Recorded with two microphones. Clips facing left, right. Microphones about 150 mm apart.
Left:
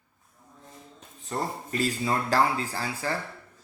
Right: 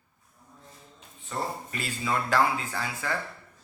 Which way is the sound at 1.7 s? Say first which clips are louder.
Left 5 dB; 35° left (ahead or behind).